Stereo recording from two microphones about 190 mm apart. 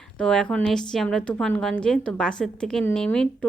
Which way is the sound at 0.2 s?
5° left (ahead or behind).